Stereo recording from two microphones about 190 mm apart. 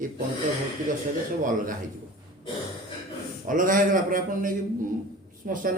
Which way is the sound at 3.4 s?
45° right (ahead or behind).